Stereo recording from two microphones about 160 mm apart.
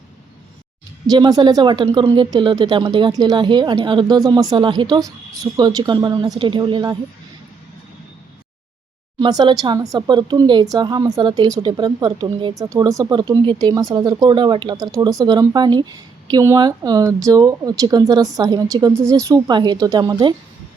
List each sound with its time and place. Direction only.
1.1 s a woman's voice: 25° right (ahead or behind)
9.4 s a woman's voice: 30° right (ahead or behind)